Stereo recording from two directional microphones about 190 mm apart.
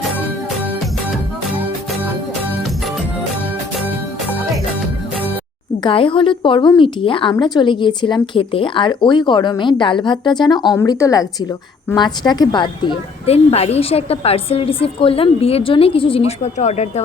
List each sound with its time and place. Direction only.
5.8 s a woman's voice: 30° left (ahead or behind)